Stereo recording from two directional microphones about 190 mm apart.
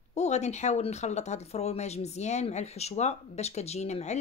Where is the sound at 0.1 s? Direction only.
35° left (ahead or behind).